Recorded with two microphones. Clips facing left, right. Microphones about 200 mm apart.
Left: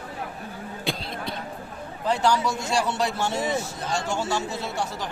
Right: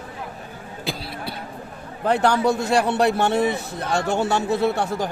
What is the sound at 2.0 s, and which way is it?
A man's voice, 60° right (ahead or behind).